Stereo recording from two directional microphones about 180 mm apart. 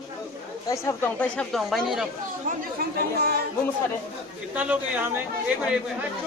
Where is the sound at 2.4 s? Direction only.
60° right (ahead or behind).